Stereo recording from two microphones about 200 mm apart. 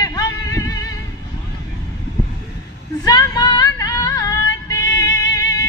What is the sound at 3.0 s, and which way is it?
Female singing, 20° left (ahead or behind).